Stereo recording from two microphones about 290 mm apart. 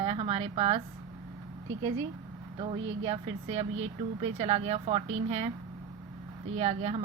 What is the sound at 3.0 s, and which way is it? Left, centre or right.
Speech, right.